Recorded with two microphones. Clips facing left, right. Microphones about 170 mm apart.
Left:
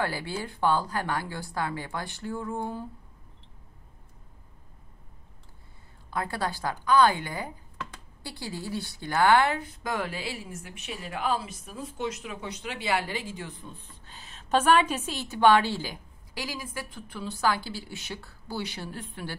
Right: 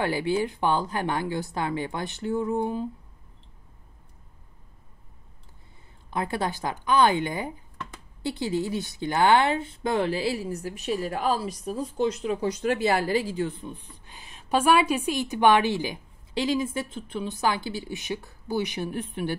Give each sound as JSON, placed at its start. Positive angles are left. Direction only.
{"t": 0.0, "sound": "a woman's voice", "side_deg": -20}
{"t": 6.0, "sound": "a woman's voice", "side_deg": -20}
{"t": 13.7, "sound": "a woman's voice", "side_deg": -15}